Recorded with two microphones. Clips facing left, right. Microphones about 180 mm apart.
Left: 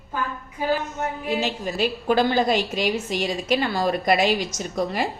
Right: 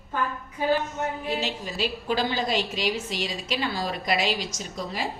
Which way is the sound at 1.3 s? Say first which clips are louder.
Left 5 dB; 50° left (ahead or behind).